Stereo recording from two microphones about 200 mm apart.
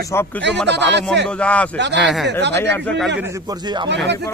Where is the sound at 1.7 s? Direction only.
60° right (ahead or behind).